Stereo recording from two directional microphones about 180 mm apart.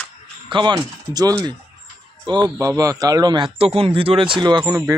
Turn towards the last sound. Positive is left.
turn(degrees=-20)  # may be behind; listen again after turning